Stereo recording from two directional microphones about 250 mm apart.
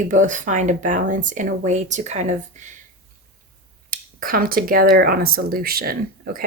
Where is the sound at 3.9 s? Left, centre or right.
Right.